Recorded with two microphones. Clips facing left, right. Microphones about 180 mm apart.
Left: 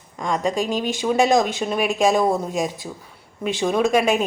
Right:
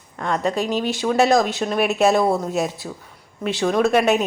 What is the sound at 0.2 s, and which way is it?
A woman's voice, 10° left (ahead or behind).